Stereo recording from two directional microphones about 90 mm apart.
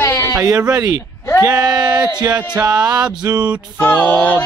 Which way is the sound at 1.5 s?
10° right (ahead or behind).